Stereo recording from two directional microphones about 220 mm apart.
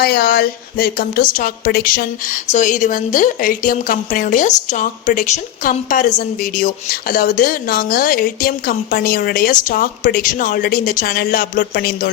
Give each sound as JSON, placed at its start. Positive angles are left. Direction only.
{"t": 0.0, "sound": "speech", "side_deg": 45}